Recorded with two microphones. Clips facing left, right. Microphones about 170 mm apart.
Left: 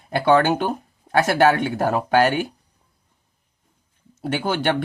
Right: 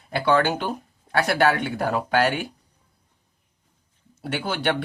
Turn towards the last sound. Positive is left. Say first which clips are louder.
# left 3 dB
turn(degrees=45)  # may be behind; listen again after turning